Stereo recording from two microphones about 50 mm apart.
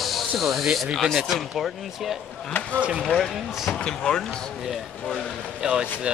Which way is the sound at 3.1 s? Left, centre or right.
Centre.